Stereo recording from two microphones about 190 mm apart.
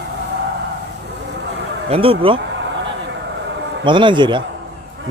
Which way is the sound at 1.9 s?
30° right (ahead or behind).